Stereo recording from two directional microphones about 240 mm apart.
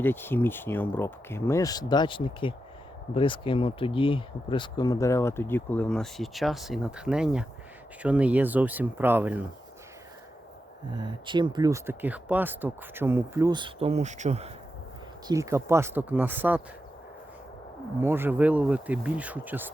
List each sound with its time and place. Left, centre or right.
0.0 s speech: centre
10.9 s speech: centre
15.3 s speech: centre
18.0 s speech: centre